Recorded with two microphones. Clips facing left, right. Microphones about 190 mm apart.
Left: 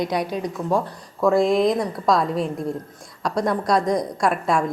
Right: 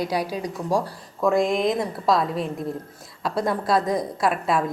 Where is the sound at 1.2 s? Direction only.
Centre (ahead or behind).